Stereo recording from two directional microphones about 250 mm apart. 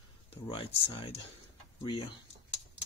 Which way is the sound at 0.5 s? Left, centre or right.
Left.